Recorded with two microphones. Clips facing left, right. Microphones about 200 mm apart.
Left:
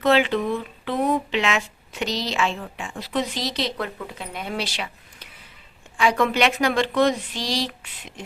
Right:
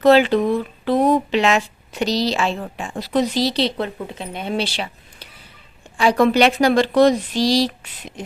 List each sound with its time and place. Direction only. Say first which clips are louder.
0.0 s speech: right 6 dB; 40° right (ahead or behind)